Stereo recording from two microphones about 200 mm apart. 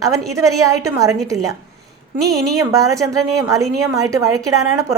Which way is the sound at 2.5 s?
15° right (ahead or behind).